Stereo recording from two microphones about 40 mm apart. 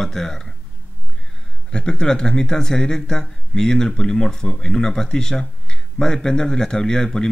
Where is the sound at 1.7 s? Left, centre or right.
Left.